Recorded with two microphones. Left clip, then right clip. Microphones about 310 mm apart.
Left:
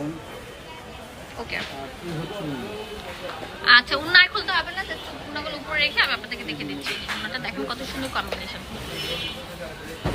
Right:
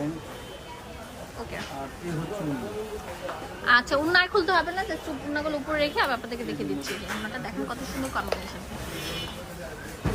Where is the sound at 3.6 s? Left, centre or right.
Centre.